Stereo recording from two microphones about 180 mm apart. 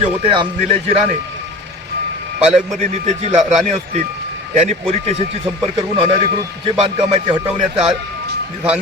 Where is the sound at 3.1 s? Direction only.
40° right (ahead or behind).